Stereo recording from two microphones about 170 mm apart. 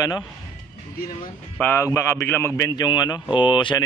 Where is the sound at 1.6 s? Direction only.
15° left (ahead or behind).